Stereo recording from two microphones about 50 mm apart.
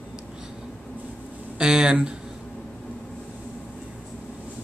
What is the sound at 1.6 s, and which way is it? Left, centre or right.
Speech, centre.